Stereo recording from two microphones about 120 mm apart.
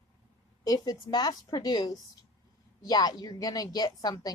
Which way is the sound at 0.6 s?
30° left (ahead or behind).